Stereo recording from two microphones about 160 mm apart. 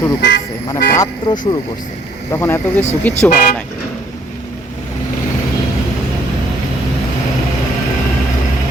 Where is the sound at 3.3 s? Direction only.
60° left (ahead or behind).